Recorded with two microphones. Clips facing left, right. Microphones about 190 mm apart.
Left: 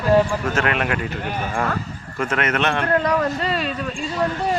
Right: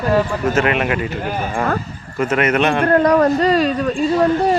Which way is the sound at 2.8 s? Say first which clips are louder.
Right 9 dB; 40° right (ahead or behind).